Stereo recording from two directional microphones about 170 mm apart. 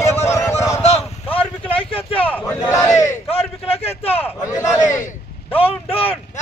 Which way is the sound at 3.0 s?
35° left (ahead or behind).